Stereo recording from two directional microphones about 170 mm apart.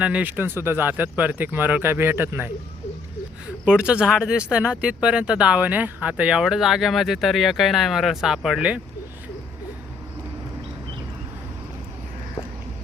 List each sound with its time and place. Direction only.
0.0 s speech: 10° right (ahead or behind)
3.7 s speech: 5° right (ahead or behind)